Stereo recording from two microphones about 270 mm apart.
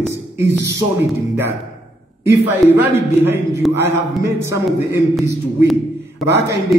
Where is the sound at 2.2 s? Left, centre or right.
Centre.